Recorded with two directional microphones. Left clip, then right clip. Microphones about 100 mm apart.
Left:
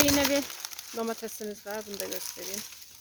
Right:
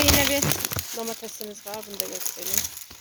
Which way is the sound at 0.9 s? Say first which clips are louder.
Even; 45° left (ahead or behind).